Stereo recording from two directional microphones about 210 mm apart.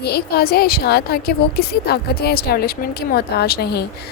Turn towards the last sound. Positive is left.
turn(degrees=50)  # may be behind; listen again after turning